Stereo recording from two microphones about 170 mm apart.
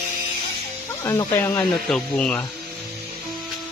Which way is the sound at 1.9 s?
5° left (ahead or behind).